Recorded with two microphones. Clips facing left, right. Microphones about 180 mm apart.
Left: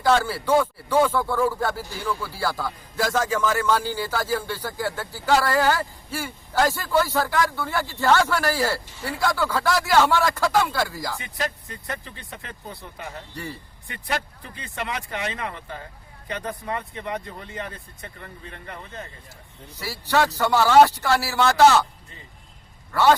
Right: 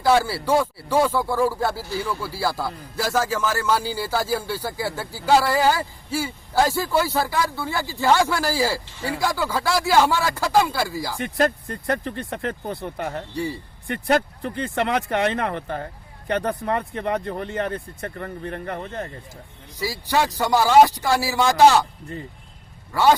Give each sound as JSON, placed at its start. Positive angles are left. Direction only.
{"t": 0.0, "sound": "speech", "side_deg": -10}
{"t": 11.2, "sound": "speech", "side_deg": -60}
{"t": 13.3, "sound": "speech", "side_deg": -10}
{"t": 13.8, "sound": "speech", "side_deg": -50}
{"t": 14.4, "sound": "speech", "side_deg": -70}
{"t": 19.8, "sound": "speech", "side_deg": -15}
{"t": 22.9, "sound": "speech", "side_deg": -10}